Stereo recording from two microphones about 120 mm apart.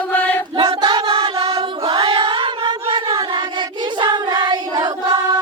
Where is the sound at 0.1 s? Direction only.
15° left (ahead or behind).